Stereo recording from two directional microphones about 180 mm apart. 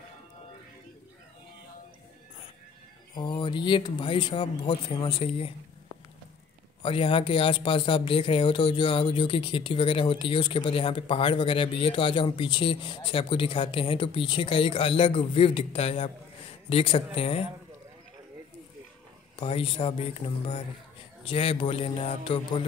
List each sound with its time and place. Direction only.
3.2 s speech: 25° left (ahead or behind)
6.8 s speech: 30° left (ahead or behind)
19.3 s speech: 30° left (ahead or behind)